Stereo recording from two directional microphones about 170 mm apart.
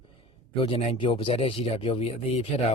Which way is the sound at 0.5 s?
35° left (ahead or behind).